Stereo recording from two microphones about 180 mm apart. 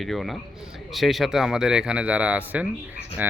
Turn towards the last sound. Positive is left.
turn(degrees=-10)  # may be behind; listen again after turning